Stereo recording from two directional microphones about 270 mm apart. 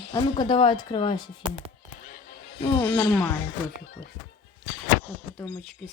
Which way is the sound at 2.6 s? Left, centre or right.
Centre.